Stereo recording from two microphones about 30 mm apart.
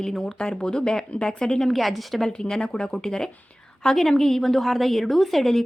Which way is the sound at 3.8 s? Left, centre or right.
Centre.